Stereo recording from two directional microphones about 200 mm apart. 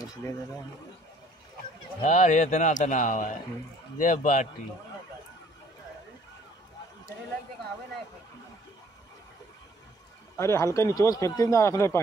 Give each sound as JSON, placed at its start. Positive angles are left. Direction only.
{"t": 2.0, "sound": "a man's voice", "side_deg": 40}
{"t": 10.3, "sound": "a man's voice", "side_deg": 15}